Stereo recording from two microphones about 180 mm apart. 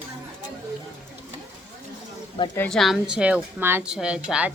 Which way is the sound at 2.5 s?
5° left (ahead or behind).